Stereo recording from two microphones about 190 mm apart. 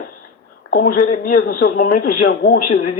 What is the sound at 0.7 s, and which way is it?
Speech, 50° left (ahead or behind).